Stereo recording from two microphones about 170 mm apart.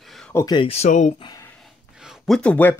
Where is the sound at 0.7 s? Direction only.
40° left (ahead or behind).